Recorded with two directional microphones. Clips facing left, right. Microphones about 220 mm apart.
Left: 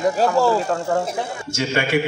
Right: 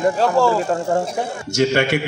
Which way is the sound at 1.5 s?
65° right (ahead or behind).